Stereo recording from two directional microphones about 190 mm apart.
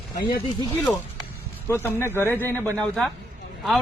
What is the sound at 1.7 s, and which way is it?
Speech, 10° left (ahead or behind).